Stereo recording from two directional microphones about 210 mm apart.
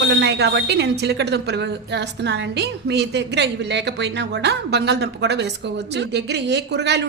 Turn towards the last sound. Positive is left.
turn(degrees=-55)  # may be behind; listen again after turning